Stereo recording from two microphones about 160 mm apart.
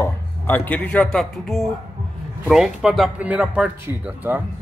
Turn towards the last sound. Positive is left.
turn(degrees=-10)  # may be behind; listen again after turning